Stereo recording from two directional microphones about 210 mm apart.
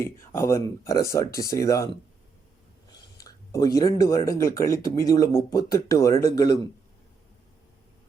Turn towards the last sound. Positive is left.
turn(degrees=15)  # may be behind; listen again after turning